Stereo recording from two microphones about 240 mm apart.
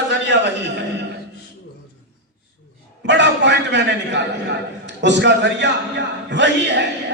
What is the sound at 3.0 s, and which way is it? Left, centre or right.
A man's voice, right.